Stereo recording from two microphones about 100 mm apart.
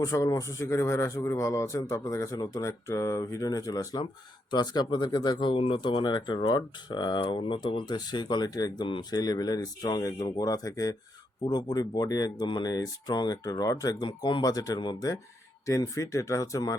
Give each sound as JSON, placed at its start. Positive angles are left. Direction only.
{"t": 0.0, "sound": "a man's voice", "side_deg": 35}
{"t": 14.1, "sound": "a man's voice", "side_deg": 50}
{"t": 16.0, "sound": "a man's voice", "side_deg": 35}